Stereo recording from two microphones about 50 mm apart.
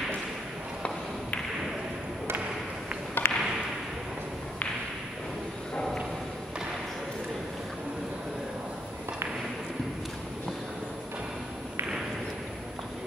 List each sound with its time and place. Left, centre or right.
3.2 s whip: left